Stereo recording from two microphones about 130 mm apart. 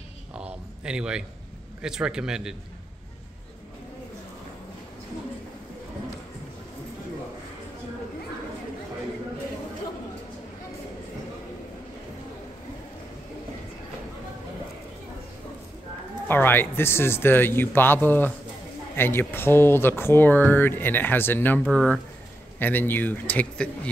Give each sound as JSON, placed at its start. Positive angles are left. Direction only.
{"t": 0.3, "sound": "a sound", "side_deg": -5}
{"t": 1.8, "sound": "speech", "side_deg": -5}
{"t": 16.3, "sound": "speech", "side_deg": 15}